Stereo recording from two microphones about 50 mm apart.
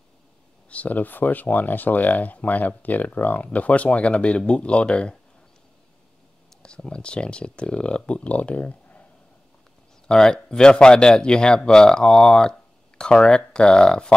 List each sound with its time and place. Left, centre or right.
0.7 s speech: left
6.6 s speech: centre
10.0 s speech: centre